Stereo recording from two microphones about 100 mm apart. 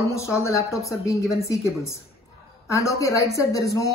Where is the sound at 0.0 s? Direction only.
30° left (ahead or behind).